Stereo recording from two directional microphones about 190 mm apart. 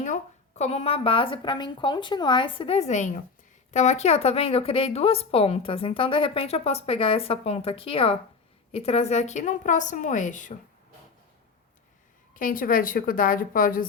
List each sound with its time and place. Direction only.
0.0 s a woman's voice: 40° left (ahead or behind)
12.3 s a woman's voice: 45° left (ahead or behind)